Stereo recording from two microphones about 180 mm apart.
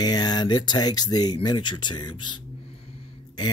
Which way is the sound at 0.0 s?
20° left (ahead or behind).